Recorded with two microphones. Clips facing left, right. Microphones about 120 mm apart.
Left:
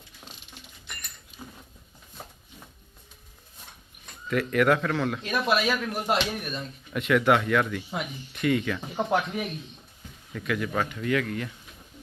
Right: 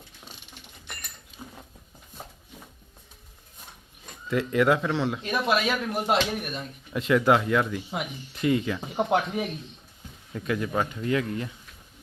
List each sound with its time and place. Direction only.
1.4 s a sound: centre (ahead or behind)
4.3 s a man's voice: 25° right (ahead or behind)
6.9 s a man's voice: 25° right (ahead or behind)